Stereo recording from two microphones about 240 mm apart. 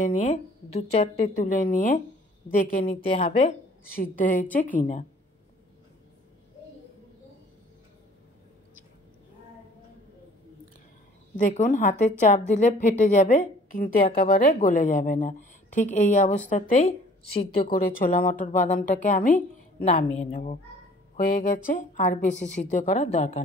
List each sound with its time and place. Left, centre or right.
0.0 s a woman's voice: left
11.3 s a woman's voice: left
17.6 s a woman's voice: left